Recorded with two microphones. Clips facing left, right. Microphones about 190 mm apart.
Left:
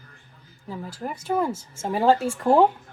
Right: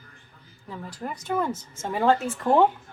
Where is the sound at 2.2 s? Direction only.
10° left (ahead or behind).